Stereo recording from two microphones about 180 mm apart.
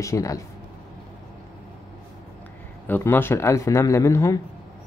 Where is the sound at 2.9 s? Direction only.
10° left (ahead or behind).